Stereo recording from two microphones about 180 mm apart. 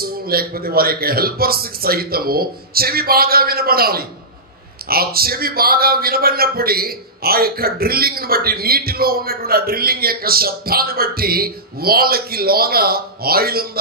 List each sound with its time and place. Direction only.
0.0 s a man's voice: 55° right (ahead or behind)